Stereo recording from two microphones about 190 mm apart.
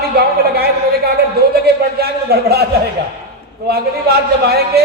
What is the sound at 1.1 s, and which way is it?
A man's voice, 55° right (ahead or behind).